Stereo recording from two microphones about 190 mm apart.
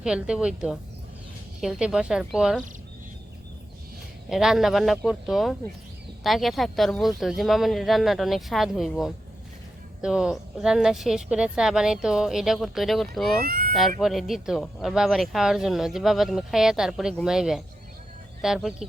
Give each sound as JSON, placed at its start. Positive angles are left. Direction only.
{"t": 0.0, "sound": "speech", "side_deg": -5}
{"t": 4.3, "sound": "speech", "side_deg": 0}
{"t": 13.4, "sound": "speech", "side_deg": -50}
{"t": 14.0, "sound": "speech", "side_deg": 0}